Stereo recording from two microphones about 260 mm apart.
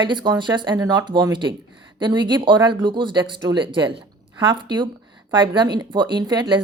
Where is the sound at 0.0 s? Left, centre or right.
Centre.